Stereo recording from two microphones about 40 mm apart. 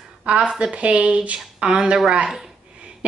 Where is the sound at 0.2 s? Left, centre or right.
Right.